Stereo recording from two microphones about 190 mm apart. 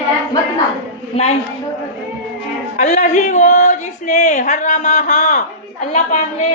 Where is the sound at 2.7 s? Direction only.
40° left (ahead or behind).